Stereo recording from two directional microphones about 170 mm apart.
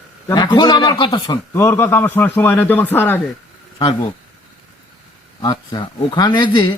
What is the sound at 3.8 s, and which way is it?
Speech, 25° left (ahead or behind).